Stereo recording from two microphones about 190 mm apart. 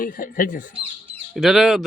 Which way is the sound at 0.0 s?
45° left (ahead or behind).